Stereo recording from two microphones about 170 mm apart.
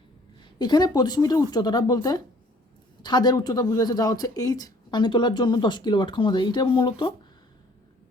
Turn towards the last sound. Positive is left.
turn(degrees=30)  # may be behind; listen again after turning